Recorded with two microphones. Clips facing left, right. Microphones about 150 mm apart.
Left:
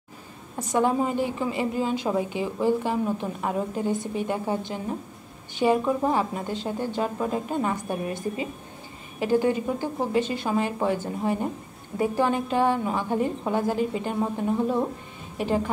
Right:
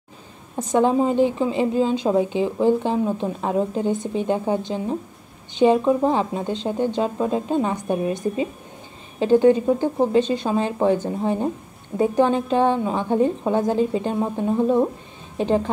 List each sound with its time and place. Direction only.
0.6 s a woman's voice: 20° right (ahead or behind)
9.2 s a woman's voice: 20° right (ahead or behind)